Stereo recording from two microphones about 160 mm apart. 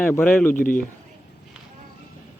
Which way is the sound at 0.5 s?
55° left (ahead or behind).